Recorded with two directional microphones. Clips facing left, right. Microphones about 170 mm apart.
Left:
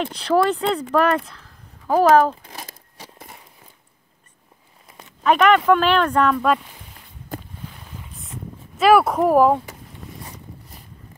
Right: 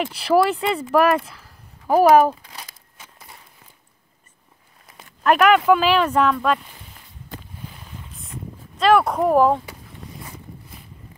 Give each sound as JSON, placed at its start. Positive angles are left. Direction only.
{"t": 0.0, "sound": "speech", "side_deg": -10}
{"t": 2.5, "sound": "a sound", "side_deg": 45}
{"t": 5.2, "sound": "speech", "side_deg": -5}
{"t": 8.7, "sound": "speech", "side_deg": 5}